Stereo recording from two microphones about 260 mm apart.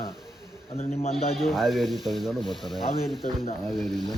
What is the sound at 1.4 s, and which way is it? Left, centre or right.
Speech, centre.